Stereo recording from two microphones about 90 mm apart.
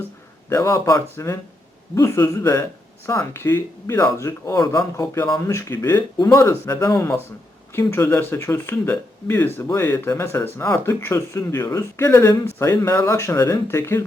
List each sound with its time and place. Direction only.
0.5 s speech: 35° left (ahead or behind)